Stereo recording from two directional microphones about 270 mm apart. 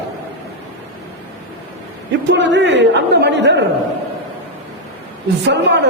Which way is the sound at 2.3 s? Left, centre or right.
Right.